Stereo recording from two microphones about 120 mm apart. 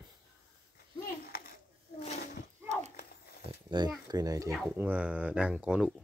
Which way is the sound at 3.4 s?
40° right (ahead or behind).